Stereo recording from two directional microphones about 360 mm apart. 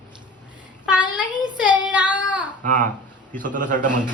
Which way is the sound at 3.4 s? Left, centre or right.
Right.